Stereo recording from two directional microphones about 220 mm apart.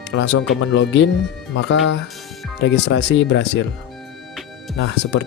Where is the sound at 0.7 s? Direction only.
55° left (ahead or behind).